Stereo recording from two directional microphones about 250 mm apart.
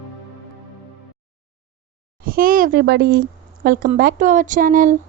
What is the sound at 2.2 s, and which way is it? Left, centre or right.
A child's voice, right.